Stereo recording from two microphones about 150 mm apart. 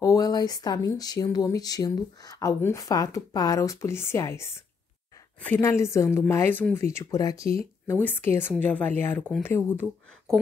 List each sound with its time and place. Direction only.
0.0 s speech: 25° left (ahead or behind)
7.8 s speech: 15° left (ahead or behind)